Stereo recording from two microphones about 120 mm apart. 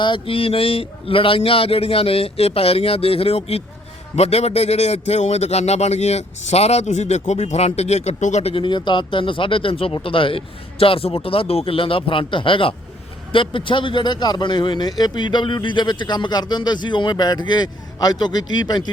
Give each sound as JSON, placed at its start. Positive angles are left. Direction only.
{"t": 0.0, "sound": "a man's voice", "side_deg": 45}
{"t": 8.6, "sound": "speech", "side_deg": 40}